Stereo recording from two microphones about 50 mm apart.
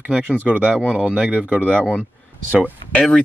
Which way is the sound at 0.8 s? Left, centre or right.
Right.